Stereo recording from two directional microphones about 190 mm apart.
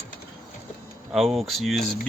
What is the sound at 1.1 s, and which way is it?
Speech, centre (ahead or behind).